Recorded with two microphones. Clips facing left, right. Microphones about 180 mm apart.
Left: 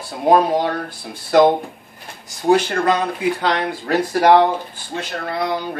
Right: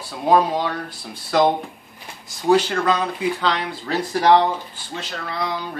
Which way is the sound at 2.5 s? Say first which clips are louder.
Left 2 dB; 50° left (ahead or behind).